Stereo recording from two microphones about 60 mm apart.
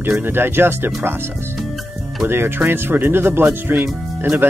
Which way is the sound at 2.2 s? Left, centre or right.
Right.